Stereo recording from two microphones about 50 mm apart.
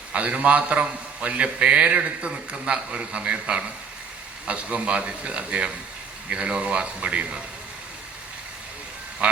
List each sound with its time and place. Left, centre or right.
0.1 s a man's voice: right
9.2 s a man's voice: right